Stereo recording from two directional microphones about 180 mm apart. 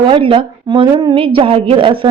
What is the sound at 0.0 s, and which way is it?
A woman's voice, 30° right (ahead or behind).